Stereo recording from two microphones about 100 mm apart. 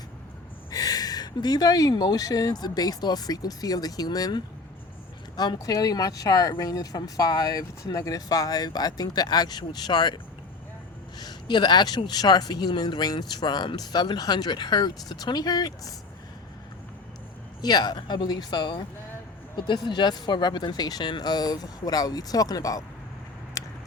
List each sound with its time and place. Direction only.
0.7 s speech: 40° left (ahead or behind)
5.5 s speech: 40° left (ahead or behind)
11.2 s speech: 50° left (ahead or behind)
17.6 s speech: 45° left (ahead or behind)
23.6 s a sound: 35° left (ahead or behind)